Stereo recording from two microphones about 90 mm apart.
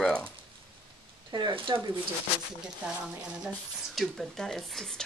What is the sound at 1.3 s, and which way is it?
Speech, 50° right (ahead or behind).